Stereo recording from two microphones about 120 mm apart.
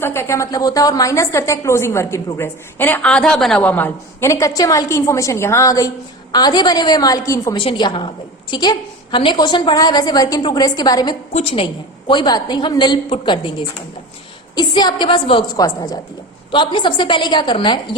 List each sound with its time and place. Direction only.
0.0 s a woman's voice: 20° left (ahead or behind); by 3.6 s 5° left (ahead or behind)
3.6 s a woman's voice: 15° left (ahead or behind)
7.5 s a woman's voice: 45° left (ahead or behind)
11.3 s a woman's voice: 50° left (ahead or behind)
15.5 s a woman's voice: 30° left (ahead or behind)
16.5 s a woman's voice: 40° left (ahead or behind)